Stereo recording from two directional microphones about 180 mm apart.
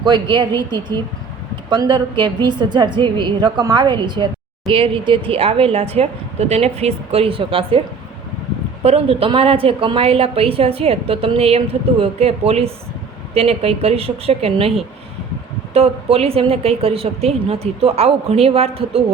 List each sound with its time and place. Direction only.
0.0 s a woman's voice: 25° right (ahead or behind)
8.8 s a woman's voice: 35° right (ahead or behind)